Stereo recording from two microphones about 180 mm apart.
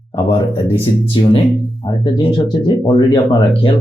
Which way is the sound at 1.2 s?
25° left (ahead or behind).